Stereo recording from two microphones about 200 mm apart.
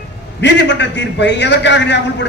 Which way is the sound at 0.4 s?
60° left (ahead or behind).